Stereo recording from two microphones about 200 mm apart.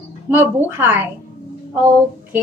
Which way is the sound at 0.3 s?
10° right (ahead or behind).